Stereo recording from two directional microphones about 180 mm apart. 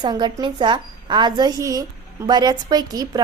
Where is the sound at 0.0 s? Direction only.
25° right (ahead or behind).